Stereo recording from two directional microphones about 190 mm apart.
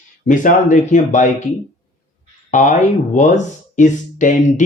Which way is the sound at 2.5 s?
40° left (ahead or behind).